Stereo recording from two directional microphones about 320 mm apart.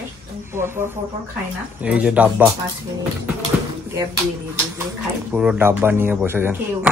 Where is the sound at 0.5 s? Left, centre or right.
Centre.